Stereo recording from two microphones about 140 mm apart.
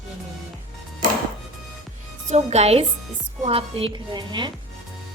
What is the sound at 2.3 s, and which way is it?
A woman's voice, 50° right (ahead or behind).